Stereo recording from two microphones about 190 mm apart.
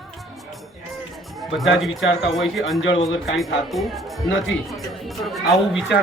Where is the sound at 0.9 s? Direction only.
Centre (ahead or behind).